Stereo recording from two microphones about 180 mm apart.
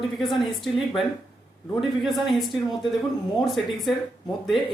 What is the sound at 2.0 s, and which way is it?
Speech, centre (ahead or behind).